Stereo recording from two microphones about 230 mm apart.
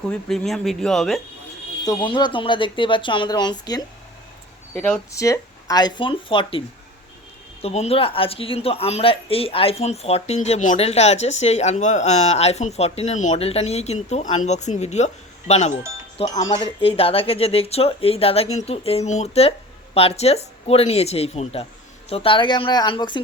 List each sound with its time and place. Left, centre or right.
0.1 s speech: centre
1.8 s a woman's voice: centre
7.6 s a woman's voice: left